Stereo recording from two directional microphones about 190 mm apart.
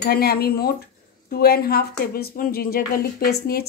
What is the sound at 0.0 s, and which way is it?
A woman's voice, 55° left (ahead or behind).